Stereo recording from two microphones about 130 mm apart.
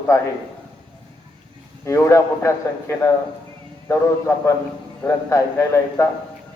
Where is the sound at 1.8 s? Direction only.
25° left (ahead or behind).